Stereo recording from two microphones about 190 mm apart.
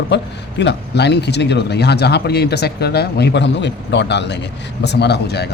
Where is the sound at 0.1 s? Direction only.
60° left (ahead or behind).